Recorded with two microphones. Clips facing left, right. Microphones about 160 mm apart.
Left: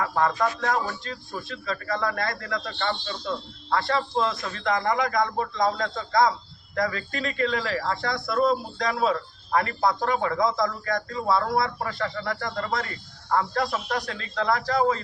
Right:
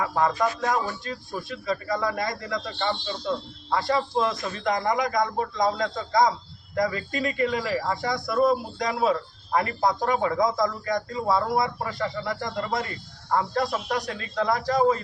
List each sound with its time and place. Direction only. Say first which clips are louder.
0.0 s speech: even; 15° right (ahead or behind)